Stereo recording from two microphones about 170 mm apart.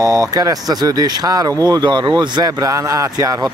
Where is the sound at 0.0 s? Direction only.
20° right (ahead or behind).